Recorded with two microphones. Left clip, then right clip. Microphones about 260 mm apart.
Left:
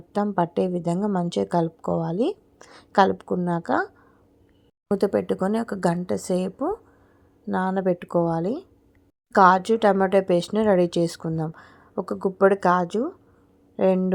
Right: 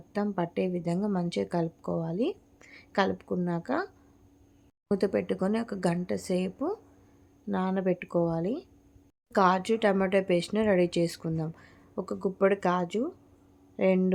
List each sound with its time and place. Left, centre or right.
0.1 s a woman's voice: centre